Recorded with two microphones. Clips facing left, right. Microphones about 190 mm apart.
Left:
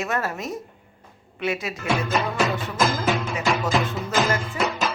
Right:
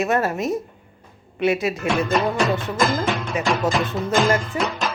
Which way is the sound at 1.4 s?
60° right (ahead or behind).